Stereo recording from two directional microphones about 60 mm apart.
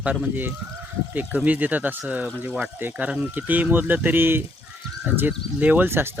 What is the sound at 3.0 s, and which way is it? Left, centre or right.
Speech, right.